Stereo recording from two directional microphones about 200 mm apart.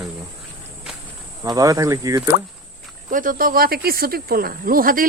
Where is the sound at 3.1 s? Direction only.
45° right (ahead or behind).